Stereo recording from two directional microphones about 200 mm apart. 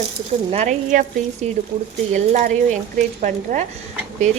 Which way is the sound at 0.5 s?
35° right (ahead or behind).